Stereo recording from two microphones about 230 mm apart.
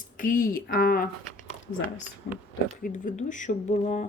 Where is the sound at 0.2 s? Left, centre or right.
Left.